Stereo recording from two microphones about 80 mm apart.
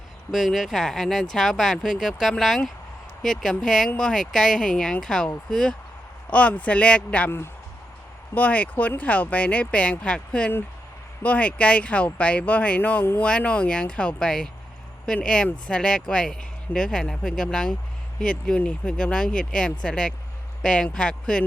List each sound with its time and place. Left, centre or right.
0.3 s speech: centre
8.4 s speech: centre